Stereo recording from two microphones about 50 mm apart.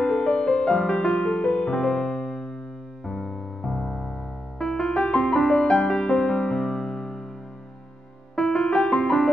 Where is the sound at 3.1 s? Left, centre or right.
Centre.